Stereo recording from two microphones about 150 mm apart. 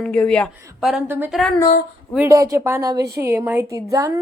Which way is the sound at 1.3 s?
Centre (ahead or behind).